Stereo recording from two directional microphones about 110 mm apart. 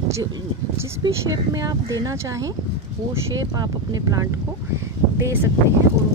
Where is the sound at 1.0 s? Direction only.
35° right (ahead or behind).